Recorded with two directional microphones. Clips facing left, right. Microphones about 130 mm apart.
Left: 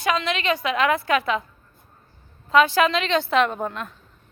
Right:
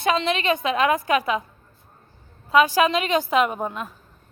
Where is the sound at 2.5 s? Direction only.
15° right (ahead or behind).